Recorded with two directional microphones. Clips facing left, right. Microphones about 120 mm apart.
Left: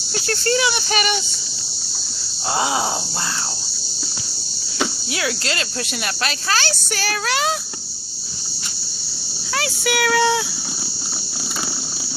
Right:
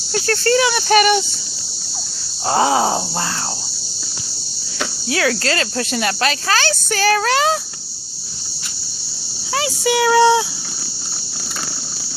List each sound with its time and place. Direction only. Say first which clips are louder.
0.1 s a sound: right 5 dB; 45° right (ahead or behind)
2.5 s speech: right 6 dB; 35° right (ahead or behind)
5.1 s speech: right 8 dB; 40° right (ahead or behind)
9.6 s speech: right 4 dB; 30° right (ahead or behind)